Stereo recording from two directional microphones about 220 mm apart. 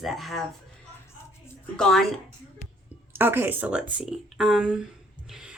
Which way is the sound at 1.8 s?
Centre (ahead or behind).